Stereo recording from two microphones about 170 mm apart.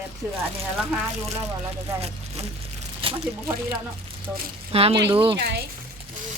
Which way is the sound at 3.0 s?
35° right (ahead or behind).